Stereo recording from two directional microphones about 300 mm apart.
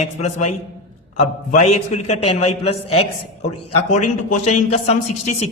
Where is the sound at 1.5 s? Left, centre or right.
Left.